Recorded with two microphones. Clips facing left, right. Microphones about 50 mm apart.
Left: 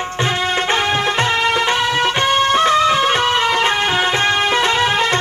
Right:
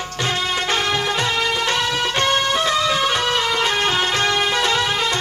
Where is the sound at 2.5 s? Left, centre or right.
Left.